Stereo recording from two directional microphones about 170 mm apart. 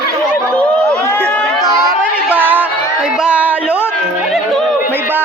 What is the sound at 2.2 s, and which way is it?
Music, 10° right (ahead or behind).